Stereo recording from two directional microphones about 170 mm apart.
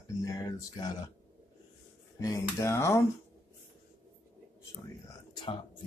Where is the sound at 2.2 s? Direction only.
15° left (ahead or behind).